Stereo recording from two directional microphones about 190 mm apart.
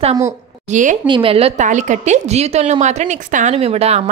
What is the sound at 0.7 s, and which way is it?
Speech, 40° right (ahead or behind).